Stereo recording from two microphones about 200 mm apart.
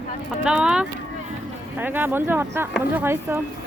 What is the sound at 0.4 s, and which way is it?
Speech, 5° right (ahead or behind).